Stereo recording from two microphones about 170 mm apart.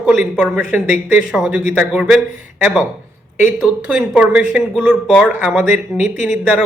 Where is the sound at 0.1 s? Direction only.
Centre (ahead or behind).